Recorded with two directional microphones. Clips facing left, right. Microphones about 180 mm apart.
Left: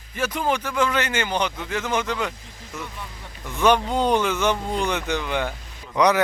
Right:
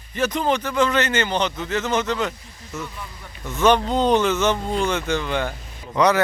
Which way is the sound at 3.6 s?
10° left (ahead or behind).